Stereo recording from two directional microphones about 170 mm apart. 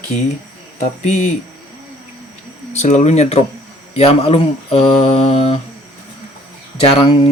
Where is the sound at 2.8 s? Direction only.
45° left (ahead or behind).